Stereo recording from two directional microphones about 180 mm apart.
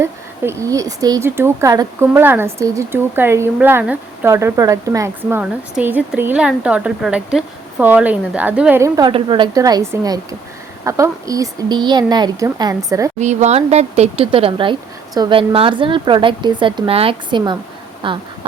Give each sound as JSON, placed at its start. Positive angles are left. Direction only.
{"t": 0.0, "sound": "speech", "side_deg": -15}
{"t": 9.0, "sound": "speech", "side_deg": -25}
{"t": 13.1, "sound": "speech", "side_deg": -40}